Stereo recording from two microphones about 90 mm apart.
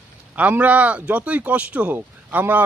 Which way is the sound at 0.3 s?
15° right (ahead or behind).